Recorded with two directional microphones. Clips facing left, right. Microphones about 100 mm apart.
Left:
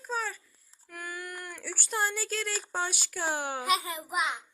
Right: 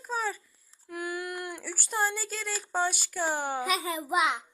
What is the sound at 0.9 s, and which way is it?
Speech, 20° right (ahead or behind).